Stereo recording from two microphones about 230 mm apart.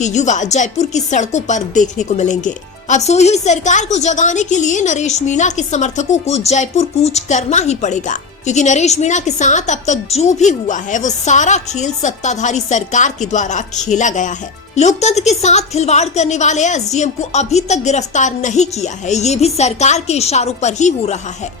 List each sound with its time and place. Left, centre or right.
0.0 s a woman's voice: left